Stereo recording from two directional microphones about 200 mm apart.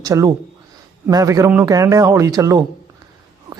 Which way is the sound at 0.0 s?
15° right (ahead or behind).